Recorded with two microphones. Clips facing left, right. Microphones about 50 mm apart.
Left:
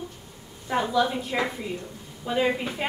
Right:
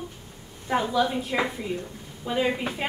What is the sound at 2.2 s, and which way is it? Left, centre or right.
Speech, centre.